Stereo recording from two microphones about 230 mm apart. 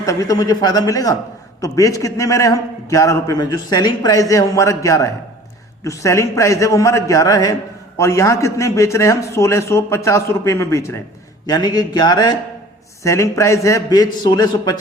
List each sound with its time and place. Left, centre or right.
0.0 s a man's voice: centre